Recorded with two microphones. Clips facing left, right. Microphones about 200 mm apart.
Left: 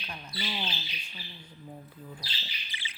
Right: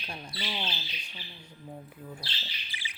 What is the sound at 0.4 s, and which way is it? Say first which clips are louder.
Speech: even; centre (ahead or behind).